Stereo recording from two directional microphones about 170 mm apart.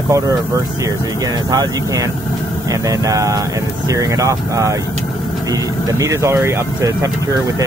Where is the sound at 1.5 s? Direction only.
20° right (ahead or behind).